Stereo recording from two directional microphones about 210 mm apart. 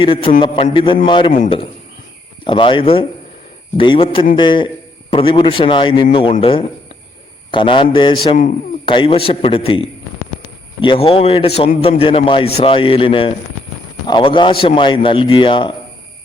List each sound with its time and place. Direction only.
0.0 s a man's voice: 25° left (ahead or behind)
2.4 s a man's voice: 25° left (ahead or behind)